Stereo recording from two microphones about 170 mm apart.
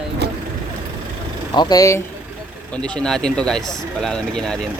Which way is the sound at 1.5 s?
25° left (ahead or behind).